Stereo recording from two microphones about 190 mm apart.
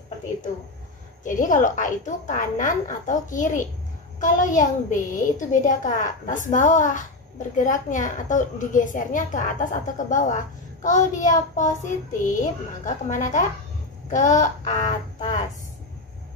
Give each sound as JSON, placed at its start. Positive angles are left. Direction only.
{"t": 1.2, "sound": "a woman's voice", "side_deg": 45}